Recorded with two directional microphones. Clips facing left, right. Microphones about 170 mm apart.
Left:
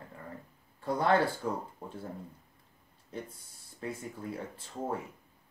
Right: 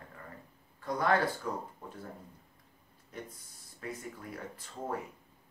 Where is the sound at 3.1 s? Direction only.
30° left (ahead or behind).